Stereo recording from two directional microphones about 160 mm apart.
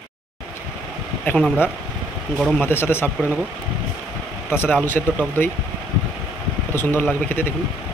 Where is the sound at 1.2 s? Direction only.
Centre (ahead or behind).